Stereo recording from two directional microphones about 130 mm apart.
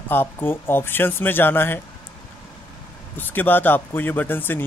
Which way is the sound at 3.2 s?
15° left (ahead or behind).